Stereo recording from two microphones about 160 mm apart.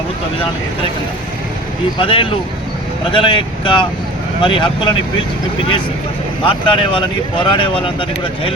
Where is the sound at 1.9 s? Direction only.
35° left (ahead or behind).